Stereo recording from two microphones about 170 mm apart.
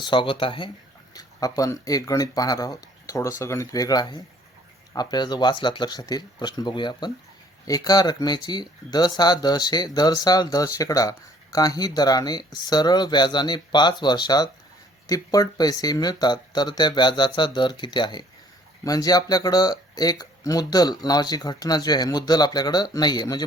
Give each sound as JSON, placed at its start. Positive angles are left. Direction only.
{"t": 0.0, "sound": "speech", "side_deg": 30}
{"t": 1.1, "sound": "speech", "side_deg": 20}